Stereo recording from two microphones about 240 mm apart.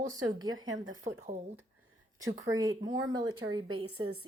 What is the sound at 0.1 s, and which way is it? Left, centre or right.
Speech, centre.